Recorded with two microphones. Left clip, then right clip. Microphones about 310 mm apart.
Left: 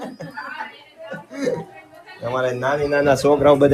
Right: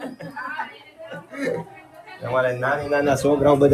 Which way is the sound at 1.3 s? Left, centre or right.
Centre.